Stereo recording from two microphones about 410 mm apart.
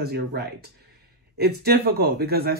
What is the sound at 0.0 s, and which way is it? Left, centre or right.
Speech, right.